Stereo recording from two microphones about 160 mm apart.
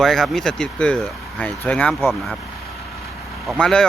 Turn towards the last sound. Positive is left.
turn(degrees=5)  # may be behind; listen again after turning